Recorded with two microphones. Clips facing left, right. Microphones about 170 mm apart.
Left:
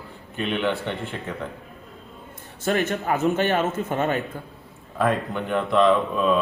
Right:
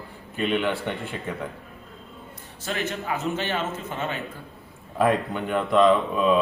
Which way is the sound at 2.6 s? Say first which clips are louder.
Left 6 dB; 50° left (ahead or behind).